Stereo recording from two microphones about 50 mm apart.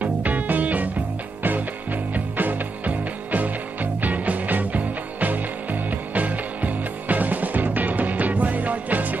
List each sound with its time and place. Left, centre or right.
0.0 s music: right
2.1 s music: right